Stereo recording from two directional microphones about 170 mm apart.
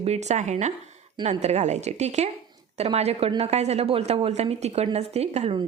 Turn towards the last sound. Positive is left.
turn(degrees=-40)  # may be behind; listen again after turning